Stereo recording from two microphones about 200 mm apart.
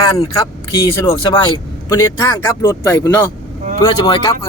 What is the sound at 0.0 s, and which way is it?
Speech, 15° left (ahead or behind).